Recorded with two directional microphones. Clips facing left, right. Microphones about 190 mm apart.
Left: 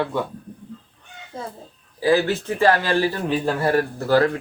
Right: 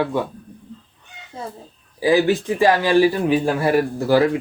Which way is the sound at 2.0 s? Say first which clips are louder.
Right 2 dB; 15° right (ahead or behind).